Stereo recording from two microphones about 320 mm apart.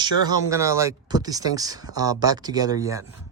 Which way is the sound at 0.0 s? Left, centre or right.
Centre.